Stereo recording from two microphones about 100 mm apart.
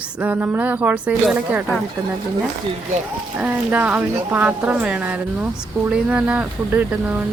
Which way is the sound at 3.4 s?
15° right (ahead or behind).